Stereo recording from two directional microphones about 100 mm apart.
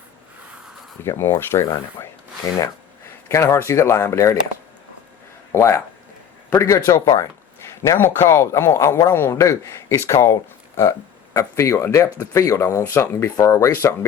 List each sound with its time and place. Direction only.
1.0 s speech: 25° left (ahead or behind)
2.4 s speech: 35° left (ahead or behind)
5.5 s speech: 25° left (ahead or behind)
11.3 s speech: 30° left (ahead or behind)